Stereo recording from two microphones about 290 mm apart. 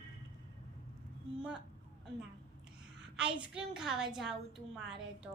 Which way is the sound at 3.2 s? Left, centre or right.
Centre.